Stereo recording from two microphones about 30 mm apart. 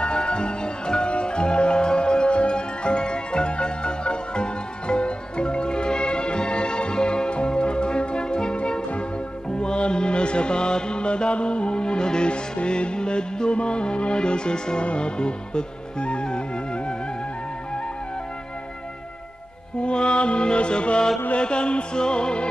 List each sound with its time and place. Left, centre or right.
0.0 s music: left
19.8 s music: left